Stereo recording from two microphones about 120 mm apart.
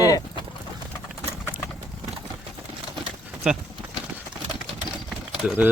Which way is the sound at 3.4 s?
10° right (ahead or behind).